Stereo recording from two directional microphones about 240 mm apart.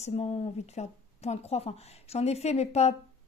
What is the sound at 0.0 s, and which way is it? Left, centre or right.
Speech, left.